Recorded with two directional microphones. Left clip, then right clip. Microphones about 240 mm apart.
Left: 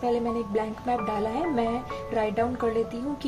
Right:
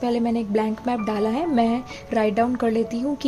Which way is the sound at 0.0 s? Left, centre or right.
Right.